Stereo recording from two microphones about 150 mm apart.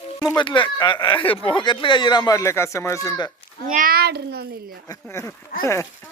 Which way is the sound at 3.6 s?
65° right (ahead or behind).